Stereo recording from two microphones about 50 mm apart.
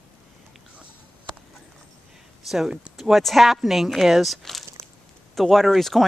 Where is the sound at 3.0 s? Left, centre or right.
Centre.